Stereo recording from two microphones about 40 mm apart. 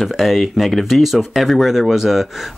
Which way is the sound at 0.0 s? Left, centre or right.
Centre.